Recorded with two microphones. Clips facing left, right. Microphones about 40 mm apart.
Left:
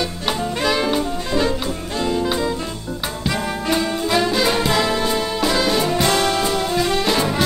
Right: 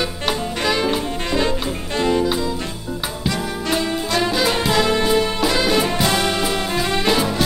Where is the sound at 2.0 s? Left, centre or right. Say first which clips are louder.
Right 3 dB; right.